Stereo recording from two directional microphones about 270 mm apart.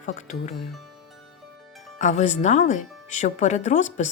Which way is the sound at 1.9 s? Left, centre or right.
Left.